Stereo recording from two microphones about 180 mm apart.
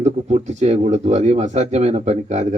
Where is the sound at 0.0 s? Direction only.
40° right (ahead or behind).